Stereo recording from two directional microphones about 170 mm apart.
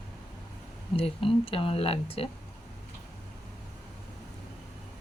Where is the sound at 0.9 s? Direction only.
35° left (ahead or behind).